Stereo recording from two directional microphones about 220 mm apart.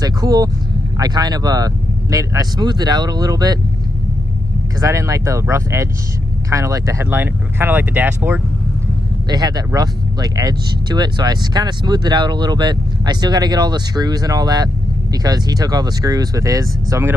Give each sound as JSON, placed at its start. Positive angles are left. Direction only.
{"t": 0.0, "sound": "speech", "side_deg": -15}
{"t": 4.8, "sound": "speech", "side_deg": -15}